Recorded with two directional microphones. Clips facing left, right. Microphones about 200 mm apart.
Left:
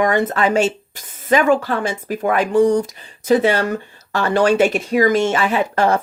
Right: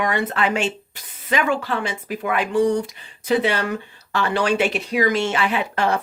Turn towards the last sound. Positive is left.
turn(degrees=45)  # may be behind; listen again after turning